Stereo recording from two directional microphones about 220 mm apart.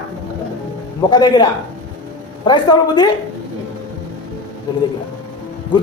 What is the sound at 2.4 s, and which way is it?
Speech, 20° left (ahead or behind).